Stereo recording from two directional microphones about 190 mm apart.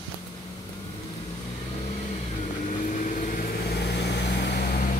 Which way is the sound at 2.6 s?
45° left (ahead or behind).